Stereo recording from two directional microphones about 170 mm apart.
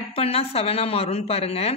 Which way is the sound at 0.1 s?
35° left (ahead or behind).